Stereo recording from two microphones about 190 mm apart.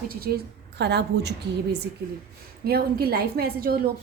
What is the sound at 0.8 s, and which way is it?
Speech, 60° right (ahead or behind).